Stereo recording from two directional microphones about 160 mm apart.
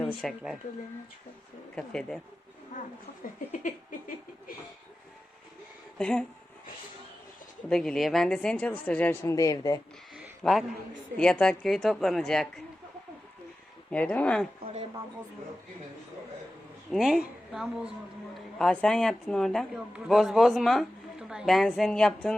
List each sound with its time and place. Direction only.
0.2 s a man's voice: centre (ahead or behind)
1.7 s a man's voice: 5° left (ahead or behind)
3.6 s a sound: 60° left (ahead or behind)
6.0 s a man's voice: 5° left (ahead or behind)
7.7 s a man's voice: 5° left (ahead or behind)
9.3 s speech: 20° left (ahead or behind)
10.4 s a man's voice: centre (ahead or behind)
13.9 s speech: 10° left (ahead or behind)
14.6 s a woman's voice: 35° right (ahead or behind)
16.9 s a man's voice: 5° right (ahead or behind)